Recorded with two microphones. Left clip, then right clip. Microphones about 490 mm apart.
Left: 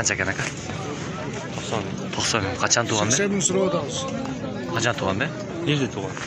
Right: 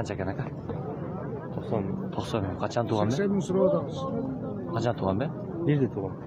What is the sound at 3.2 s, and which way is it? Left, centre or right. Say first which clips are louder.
Speech: left 5 dB; right.